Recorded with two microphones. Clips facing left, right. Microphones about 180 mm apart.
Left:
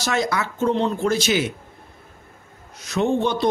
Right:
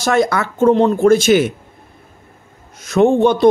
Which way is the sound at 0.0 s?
55° right (ahead or behind).